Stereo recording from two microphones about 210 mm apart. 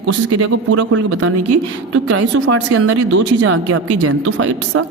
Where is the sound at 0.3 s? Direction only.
90° right.